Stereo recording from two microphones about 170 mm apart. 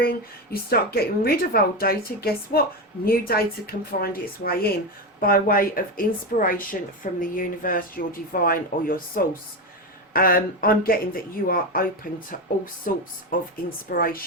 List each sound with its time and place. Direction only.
0.5 s speech: 65° left (ahead or behind)